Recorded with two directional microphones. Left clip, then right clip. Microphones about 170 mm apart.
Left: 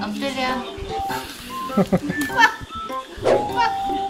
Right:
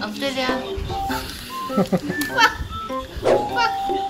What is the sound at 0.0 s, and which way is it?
Speech, 30° right (ahead or behind).